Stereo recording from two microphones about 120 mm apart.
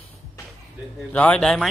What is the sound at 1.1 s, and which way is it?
Speech, 10° left (ahead or behind).